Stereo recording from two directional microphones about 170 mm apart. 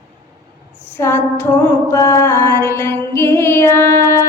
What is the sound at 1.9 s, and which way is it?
Music, 15° left (ahead or behind).